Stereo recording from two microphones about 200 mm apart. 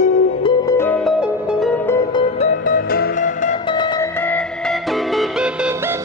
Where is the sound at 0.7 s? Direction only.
10° left (ahead or behind).